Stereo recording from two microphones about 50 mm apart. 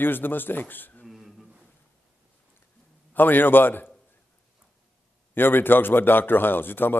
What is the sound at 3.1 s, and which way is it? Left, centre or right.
Speech, left.